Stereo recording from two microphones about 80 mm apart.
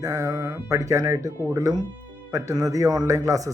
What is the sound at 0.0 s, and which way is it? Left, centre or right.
Speech, right.